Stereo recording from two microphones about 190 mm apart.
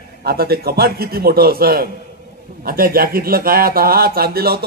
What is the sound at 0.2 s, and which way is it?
A man's voice, 55° right (ahead or behind).